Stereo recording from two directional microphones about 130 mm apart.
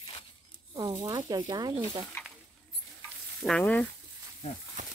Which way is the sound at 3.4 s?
5° left (ahead or behind).